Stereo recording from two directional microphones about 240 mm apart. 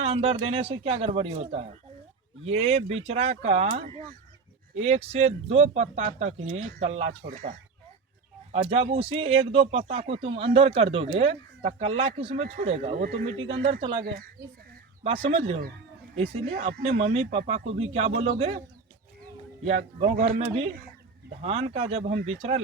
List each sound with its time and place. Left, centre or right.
0.0 s speech: right
8.7 s speech: right
14.0 s speech: right
15.0 s speech: right
16.5 s speech: right
20.0 s speech: right